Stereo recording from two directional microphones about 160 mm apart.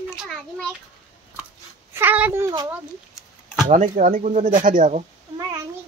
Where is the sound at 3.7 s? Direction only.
50° right (ahead or behind).